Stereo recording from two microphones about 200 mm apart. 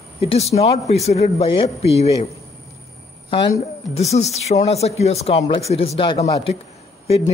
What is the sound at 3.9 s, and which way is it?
Speech, 30° left (ahead or behind).